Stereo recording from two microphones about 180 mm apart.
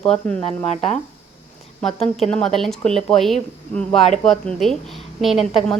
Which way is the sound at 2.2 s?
5° left (ahead or behind).